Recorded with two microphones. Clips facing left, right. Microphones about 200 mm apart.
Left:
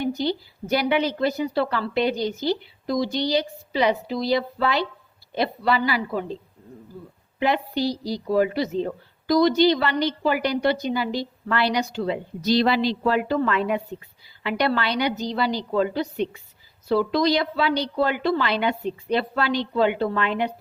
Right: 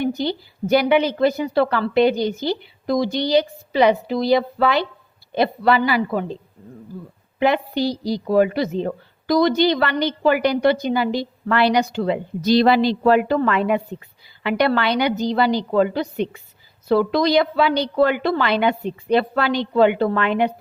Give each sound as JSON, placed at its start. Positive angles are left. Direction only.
{"t": 0.0, "sound": "a woman's voice", "side_deg": -55}
{"t": 7.3, "sound": "a woman's voice", "side_deg": -60}
{"t": 13.0, "sound": "a woman's voice", "side_deg": -60}